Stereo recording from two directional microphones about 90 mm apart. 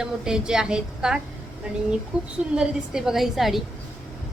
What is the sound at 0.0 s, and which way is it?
A woman's voice, 10° right (ahead or behind).